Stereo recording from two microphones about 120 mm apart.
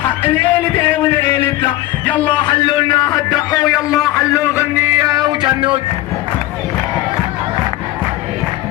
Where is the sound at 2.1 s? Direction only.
15° left (ahead or behind).